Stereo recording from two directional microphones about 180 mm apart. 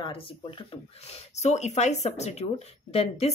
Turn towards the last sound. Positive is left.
turn(degrees=35)  # may be behind; listen again after turning